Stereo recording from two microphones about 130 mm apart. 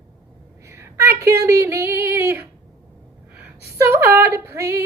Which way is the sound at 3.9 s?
20° right (ahead or behind).